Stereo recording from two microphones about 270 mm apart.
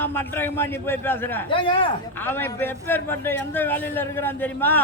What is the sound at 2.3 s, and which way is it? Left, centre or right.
A man's voice, centre.